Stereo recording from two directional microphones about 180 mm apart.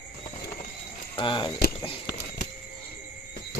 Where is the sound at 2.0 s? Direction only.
70° left (ahead or behind).